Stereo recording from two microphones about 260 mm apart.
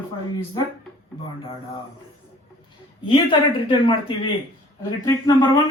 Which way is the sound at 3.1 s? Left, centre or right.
Centre.